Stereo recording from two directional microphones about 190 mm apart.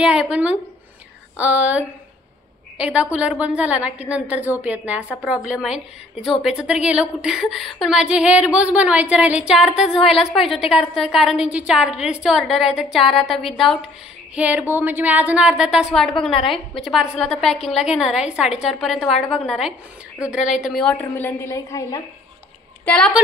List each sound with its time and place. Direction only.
0.0 s a woman's voice: 5° right (ahead or behind)
13.2 s a woman's voice: 30° left (ahead or behind)
14.3 s a woman's voice: 5° right (ahead or behind); by 22.0 s 15° left (ahead or behind)
22.8 s a woman's voice: 5° left (ahead or behind)